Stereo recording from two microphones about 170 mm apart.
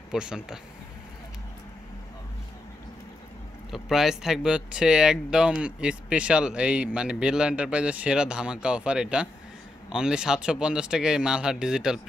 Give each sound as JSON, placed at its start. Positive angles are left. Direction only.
{"t": 0.1, "sound": "speech", "side_deg": -5}
{"t": 3.7, "sound": "speech", "side_deg": 0}